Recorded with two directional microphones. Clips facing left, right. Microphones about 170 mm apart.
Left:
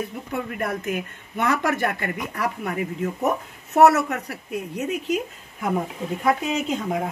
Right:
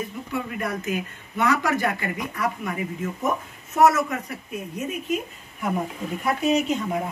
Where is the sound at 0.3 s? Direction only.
55° left (ahead or behind); by 5.7 s 90° left.